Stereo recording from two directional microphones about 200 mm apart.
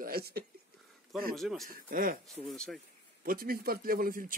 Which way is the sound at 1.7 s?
45° right (ahead or behind).